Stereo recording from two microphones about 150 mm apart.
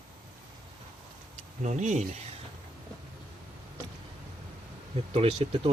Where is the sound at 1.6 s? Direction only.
50° right (ahead or behind).